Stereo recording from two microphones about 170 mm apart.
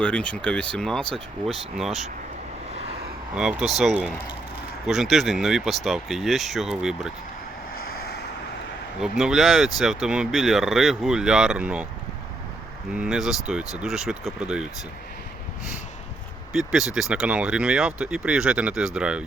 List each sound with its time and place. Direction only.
0.0 s speech: 5° left (ahead or behind)
2.7 s vehicle: 40° right (ahead or behind)
3.3 s speech: 5° right (ahead or behind)
7.8 s vehicle: 70° left (ahead or behind)
9.0 s speech: 5° right (ahead or behind)
12.9 s speech: 5° right (ahead or behind)
16.5 s speech: centre (ahead or behind)